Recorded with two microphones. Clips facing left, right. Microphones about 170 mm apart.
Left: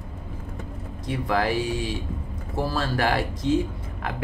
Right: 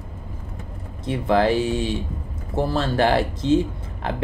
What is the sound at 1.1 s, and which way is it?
Speech, 25° right (ahead or behind).